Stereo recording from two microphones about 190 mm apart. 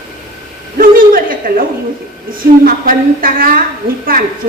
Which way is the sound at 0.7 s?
50° right (ahead or behind).